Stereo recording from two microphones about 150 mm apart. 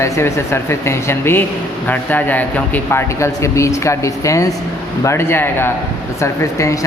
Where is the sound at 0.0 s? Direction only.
20° left (ahead or behind).